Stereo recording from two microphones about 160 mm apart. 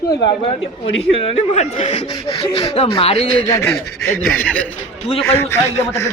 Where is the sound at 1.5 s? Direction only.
45° left (ahead or behind).